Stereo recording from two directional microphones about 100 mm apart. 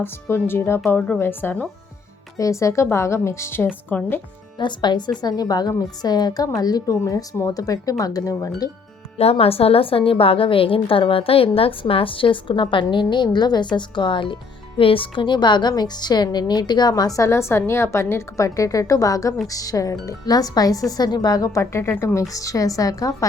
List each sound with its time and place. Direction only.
0.0 s a woman's voice: 20° left (ahead or behind)
2.4 s a woman's voice: 30° left (ahead or behind); by 4.2 s 15° left (ahead or behind)
4.5 s a woman's voice: 50° left (ahead or behind)
9.1 s a woman's voice: 85° left; by 23.1 s 35° left (ahead or behind)